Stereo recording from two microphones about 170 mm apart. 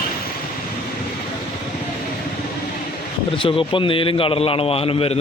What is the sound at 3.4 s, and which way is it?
A man's voice, 30° left (ahead or behind).